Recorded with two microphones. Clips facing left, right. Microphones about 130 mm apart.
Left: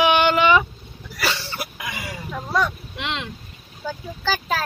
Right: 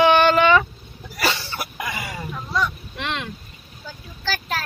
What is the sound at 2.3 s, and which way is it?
Vehicle, 60° left (ahead or behind).